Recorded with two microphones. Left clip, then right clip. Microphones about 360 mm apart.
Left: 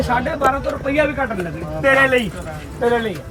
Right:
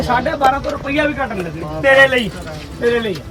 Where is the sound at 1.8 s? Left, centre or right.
Centre.